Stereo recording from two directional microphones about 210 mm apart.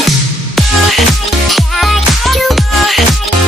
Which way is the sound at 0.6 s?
Centre (ahead or behind).